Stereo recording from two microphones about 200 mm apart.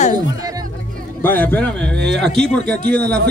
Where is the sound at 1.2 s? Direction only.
10° left (ahead or behind).